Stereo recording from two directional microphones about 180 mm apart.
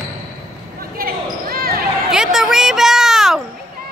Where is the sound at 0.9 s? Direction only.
55° right (ahead or behind).